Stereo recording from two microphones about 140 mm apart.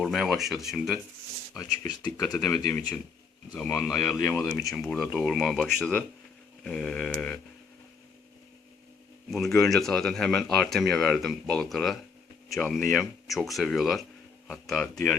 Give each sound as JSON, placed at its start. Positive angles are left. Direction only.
{"t": 0.0, "sound": "speech", "side_deg": 0}
{"t": 1.5, "sound": "speech", "side_deg": 20}
{"t": 2.2, "sound": "speech", "side_deg": 5}
{"t": 2.6, "sound": "speech", "side_deg": 15}
{"t": 4.2, "sound": "speech", "side_deg": 20}
{"t": 4.5, "sound": "speech", "side_deg": 5}
{"t": 9.3, "sound": "speech", "side_deg": 0}